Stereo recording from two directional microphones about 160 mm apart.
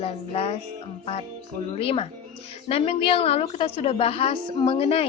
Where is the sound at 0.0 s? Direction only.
40° left (ahead or behind).